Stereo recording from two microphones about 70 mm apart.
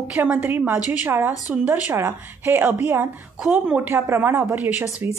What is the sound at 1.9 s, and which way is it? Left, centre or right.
Speech, right.